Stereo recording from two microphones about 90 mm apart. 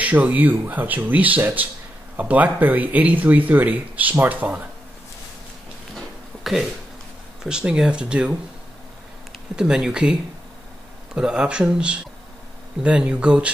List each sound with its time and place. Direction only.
0.0 s speech: 20° right (ahead or behind)
5.9 s a sound: centre (ahead or behind)
7.4 s speech: 10° right (ahead or behind)
9.6 s speech: 5° right (ahead or behind)
11.1 s speech: 10° right (ahead or behind)